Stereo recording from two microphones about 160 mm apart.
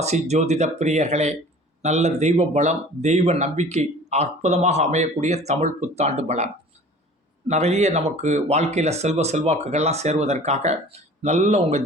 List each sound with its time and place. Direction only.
0.0 s speech: 45° right (ahead or behind)